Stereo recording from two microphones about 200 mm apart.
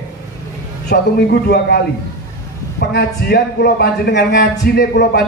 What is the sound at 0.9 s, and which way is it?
Speech, 50° left (ahead or behind).